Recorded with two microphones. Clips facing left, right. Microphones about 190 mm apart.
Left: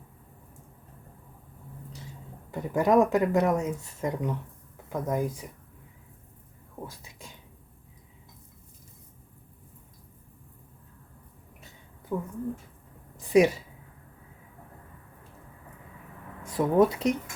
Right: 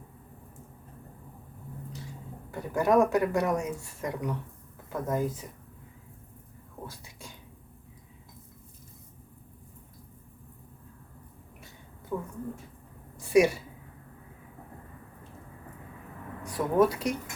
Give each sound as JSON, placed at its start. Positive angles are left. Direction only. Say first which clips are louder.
{"t": 2.5, "sound": "speech", "louder": "left 2 dB", "side_deg": 20}
{"t": 12.1, "sound": "speech", "louder": "left 2 dB", "side_deg": 10}
{"t": 13.1, "sound": "a sound", "louder": "left 1 dB", "side_deg": 20}
{"t": 16.4, "sound": "speech", "louder": "left 2 dB", "side_deg": 25}